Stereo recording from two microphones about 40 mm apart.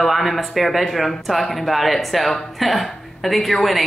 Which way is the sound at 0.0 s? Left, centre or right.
Centre.